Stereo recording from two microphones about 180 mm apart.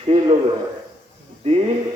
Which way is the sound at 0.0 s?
35° right (ahead or behind).